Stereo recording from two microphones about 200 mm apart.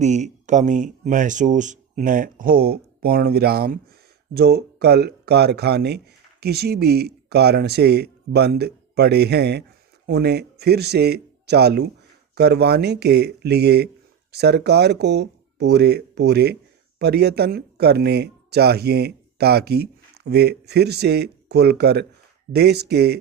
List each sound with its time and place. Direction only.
0.0 s speech: 35° right (ahead or behind); by 23.1 s 55° right (ahead or behind)